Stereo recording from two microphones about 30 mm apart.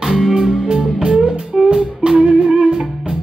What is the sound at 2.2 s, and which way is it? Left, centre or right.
Music, right.